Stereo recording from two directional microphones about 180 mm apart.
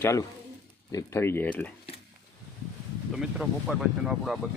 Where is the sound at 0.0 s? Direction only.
15° left (ahead or behind).